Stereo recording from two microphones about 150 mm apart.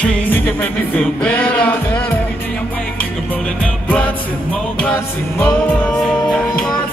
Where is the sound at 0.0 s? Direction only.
10° left (ahead or behind).